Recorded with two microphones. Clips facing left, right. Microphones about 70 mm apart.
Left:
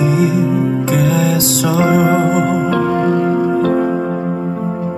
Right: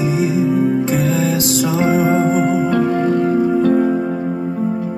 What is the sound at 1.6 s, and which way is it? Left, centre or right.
Music, left.